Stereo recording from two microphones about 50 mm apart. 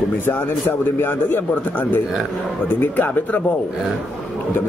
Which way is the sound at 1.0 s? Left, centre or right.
Left.